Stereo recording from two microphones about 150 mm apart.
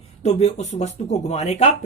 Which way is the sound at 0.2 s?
50° left (ahead or behind).